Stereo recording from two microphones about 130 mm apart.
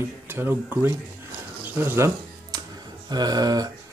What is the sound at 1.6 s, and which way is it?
Music, 15° right (ahead or behind).